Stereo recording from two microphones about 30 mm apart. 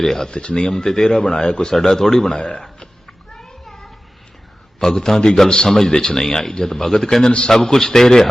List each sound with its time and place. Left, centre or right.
0.0 s speech: centre
0.3 s speech: left
1.7 s speech: centre
2.3 s speech: left
4.8 s speech: centre
5.8 s speech: left
6.2 s speech: centre
7.3 s speech: left
7.6 s speech: centre